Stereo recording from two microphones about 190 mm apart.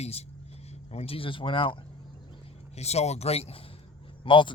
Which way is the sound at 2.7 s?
35° left (ahead or behind).